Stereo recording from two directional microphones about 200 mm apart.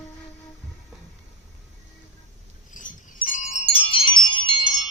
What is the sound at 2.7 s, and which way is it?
Wind chime, 40° left (ahead or behind).